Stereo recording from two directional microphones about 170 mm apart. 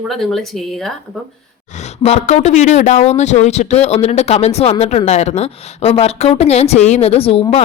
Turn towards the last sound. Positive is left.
turn(degrees=35)  # may be behind; listen again after turning